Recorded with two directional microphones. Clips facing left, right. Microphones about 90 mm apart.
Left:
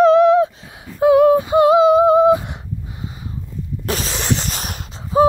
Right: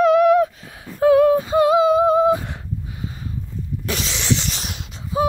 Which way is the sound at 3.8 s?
40° left (ahead or behind).